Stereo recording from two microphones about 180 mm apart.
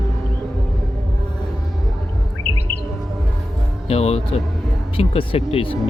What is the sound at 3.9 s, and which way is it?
Speech, 35° left (ahead or behind).